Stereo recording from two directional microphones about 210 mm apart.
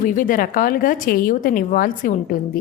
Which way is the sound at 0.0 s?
40° left (ahead or behind).